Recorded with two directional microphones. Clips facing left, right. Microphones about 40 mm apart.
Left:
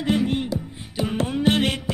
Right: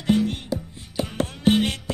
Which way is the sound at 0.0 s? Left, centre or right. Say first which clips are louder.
Even; centre.